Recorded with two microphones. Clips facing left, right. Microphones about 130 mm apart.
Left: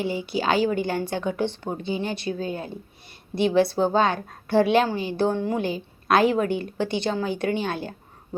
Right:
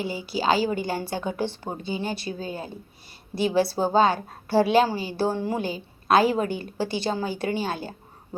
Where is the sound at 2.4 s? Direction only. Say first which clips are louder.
Left 3 dB; 30° right (ahead or behind).